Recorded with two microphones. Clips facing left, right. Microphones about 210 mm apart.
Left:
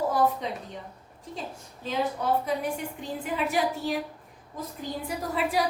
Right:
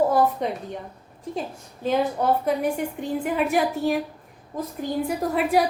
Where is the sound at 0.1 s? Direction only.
55° right (ahead or behind).